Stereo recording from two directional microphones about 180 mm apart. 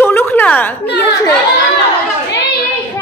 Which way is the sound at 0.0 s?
10° left (ahead or behind).